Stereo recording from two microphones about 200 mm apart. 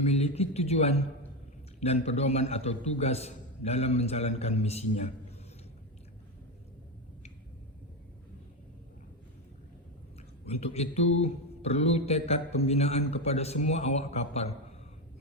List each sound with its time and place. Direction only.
0.0 s a man's voice: 30° left (ahead or behind)
10.4 s a man's voice: 30° left (ahead or behind)